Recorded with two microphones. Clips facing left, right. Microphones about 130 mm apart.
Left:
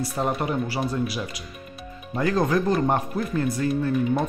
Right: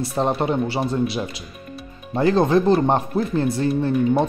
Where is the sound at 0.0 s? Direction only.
25° right (ahead or behind).